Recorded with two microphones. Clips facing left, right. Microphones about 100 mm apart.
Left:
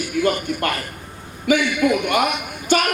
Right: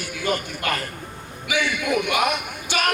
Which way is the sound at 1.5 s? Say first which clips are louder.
Left 6 dB; 45° left (ahead or behind).